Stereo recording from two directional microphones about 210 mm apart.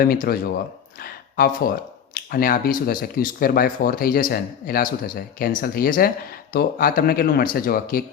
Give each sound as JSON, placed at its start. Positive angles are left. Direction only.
{"t": 0.0, "sound": "speech", "side_deg": 45}